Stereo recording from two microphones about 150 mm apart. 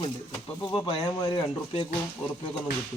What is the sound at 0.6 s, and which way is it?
Speech, 30° left (ahead or behind).